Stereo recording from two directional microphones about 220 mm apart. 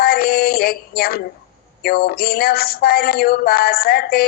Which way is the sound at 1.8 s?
45° left (ahead or behind).